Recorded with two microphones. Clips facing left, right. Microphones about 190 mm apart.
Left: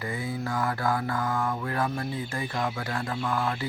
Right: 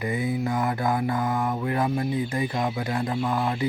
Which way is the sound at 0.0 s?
20° right (ahead or behind).